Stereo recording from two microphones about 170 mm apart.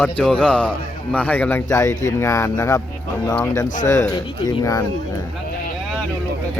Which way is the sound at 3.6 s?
50° left (ahead or behind).